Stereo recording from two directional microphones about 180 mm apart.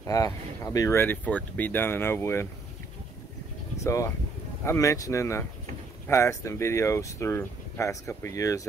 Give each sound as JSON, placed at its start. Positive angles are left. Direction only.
{"t": 0.0, "sound": "speech", "side_deg": 15}
{"t": 3.8, "sound": "speech", "side_deg": 15}